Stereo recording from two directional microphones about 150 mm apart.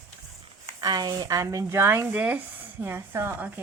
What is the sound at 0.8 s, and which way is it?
A woman's voice, 25° right (ahead or behind).